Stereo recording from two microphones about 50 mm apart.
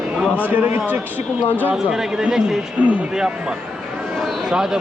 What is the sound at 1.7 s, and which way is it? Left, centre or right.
Speech, centre.